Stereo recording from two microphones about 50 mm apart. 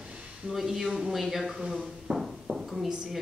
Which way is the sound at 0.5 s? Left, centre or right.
Centre.